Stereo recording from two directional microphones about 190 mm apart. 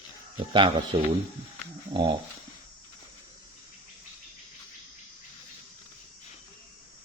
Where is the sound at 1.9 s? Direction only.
25° right (ahead or behind).